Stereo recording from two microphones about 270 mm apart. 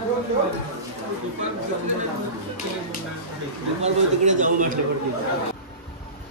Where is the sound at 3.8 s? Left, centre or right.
Right.